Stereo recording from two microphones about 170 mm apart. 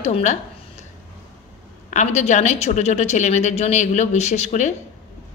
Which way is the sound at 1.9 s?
45° left (ahead or behind).